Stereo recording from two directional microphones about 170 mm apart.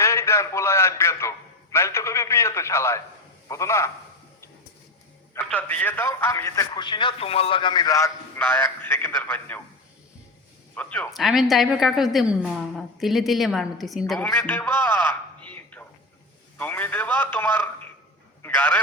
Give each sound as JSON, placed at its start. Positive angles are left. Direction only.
{"t": 0.0, "sound": "a sound", "side_deg": 15}
{"t": 3.5, "sound": "a man's voice", "side_deg": 15}
{"t": 5.5, "sound": "a man's voice", "side_deg": 10}
{"t": 10.8, "sound": "a woman's voice", "side_deg": 10}
{"t": 14.2, "sound": "a sound", "side_deg": 10}
{"t": 16.6, "sound": "a man's voice", "side_deg": 10}